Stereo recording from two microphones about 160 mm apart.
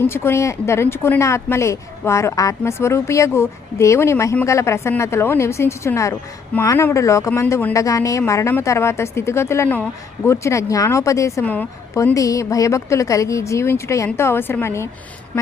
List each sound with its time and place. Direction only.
0.1 s a woman's voice: 15° left (ahead or behind)